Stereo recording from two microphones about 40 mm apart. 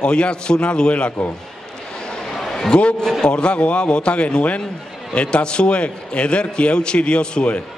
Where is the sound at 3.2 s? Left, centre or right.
Left.